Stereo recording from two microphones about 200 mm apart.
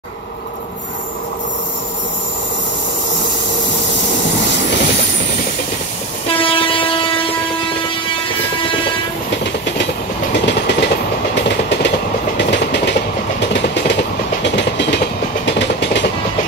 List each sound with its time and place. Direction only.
6.2 s train: 25° left (ahead or behind)
10.3 s train: 60° left (ahead or behind)
13.4 s vehicle: 60° left (ahead or behind)
14.4 s train: 60° left (ahead or behind)